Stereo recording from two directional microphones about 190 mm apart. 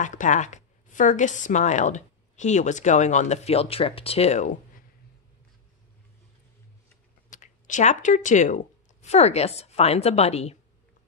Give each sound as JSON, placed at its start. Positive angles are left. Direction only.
{"t": 0.0, "sound": "a woman's voice", "side_deg": 40}
{"t": 7.2, "sound": "speech", "side_deg": 40}